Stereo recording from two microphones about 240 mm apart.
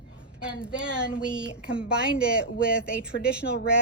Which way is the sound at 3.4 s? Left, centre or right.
Left.